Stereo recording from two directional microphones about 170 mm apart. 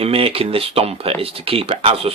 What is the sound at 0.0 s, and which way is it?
Speech, 35° right (ahead or behind).